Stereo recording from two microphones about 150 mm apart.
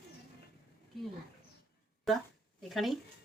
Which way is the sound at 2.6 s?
Centre (ahead or behind).